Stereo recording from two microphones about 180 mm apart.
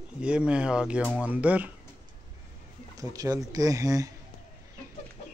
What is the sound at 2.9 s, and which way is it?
Speech, 20° right (ahead or behind).